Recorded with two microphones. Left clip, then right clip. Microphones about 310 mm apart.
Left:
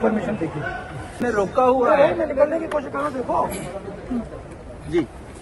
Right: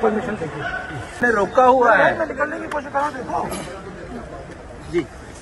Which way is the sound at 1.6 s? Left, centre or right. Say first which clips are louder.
Right 3 dB; right.